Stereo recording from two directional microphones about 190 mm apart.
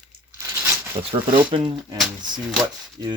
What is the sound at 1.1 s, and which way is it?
Speech, 30° right (ahead or behind).